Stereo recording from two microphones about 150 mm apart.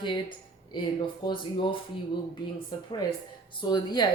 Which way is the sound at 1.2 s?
35° left (ahead or behind).